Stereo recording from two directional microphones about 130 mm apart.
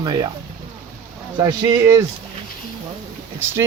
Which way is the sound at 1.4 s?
25° right (ahead or behind).